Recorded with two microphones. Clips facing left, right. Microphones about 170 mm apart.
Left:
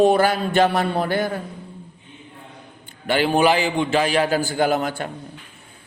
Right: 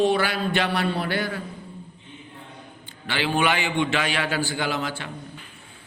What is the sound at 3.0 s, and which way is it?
A woman's voice, 45° left (ahead or behind).